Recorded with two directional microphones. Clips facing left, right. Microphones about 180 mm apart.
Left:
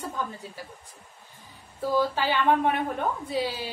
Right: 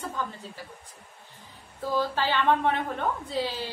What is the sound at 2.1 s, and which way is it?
A woman's voice, 10° left (ahead or behind).